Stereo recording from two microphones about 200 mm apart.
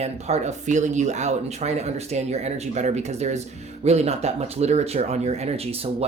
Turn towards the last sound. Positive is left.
turn(degrees=-30)  # may be behind; listen again after turning